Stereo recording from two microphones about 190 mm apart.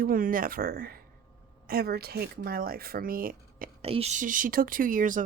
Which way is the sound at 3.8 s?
30° right (ahead or behind).